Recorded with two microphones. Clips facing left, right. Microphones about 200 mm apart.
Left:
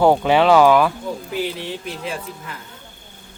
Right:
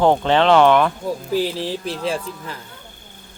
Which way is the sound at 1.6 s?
35° right (ahead or behind).